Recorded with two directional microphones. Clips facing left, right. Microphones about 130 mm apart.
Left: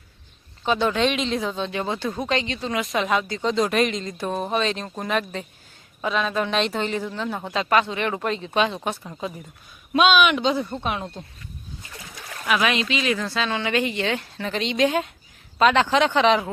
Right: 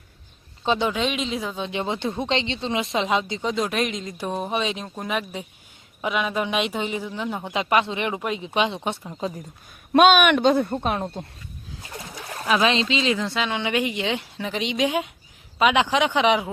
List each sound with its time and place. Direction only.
0.8 s speech: 10° right (ahead or behind)
1.6 s speech: 20° right (ahead or behind)
3.5 s a woman's voice: centre (ahead or behind); by 9.3 s 25° right (ahead or behind)
9.9 s speech: 50° right (ahead or behind)
11.0 s speech: 25° right (ahead or behind)
12.4 s a woman's voice: 30° right (ahead or behind); by 16.5 s 10° right (ahead or behind)